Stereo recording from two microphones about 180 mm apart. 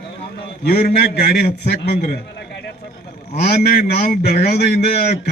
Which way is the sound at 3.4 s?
60° left (ahead or behind).